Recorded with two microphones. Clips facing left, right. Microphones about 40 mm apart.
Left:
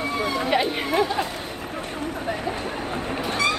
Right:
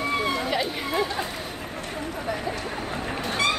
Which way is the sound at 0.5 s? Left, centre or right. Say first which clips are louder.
Left 4 dB; left.